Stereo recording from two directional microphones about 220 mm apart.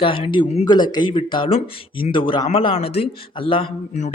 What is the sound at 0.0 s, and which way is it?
Speech, 25° left (ahead or behind).